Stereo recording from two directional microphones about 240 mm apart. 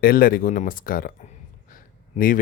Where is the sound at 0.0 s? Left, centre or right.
Left.